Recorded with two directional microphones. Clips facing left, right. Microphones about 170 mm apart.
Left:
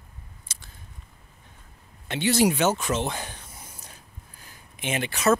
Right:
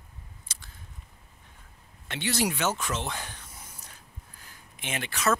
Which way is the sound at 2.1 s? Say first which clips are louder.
Left 7 dB; 20° left (ahead or behind).